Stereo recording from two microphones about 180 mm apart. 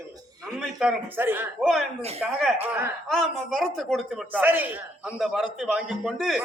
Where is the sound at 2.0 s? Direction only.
35° right (ahead or behind).